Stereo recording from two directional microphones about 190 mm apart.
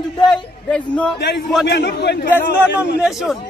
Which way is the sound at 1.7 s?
60° left (ahead or behind).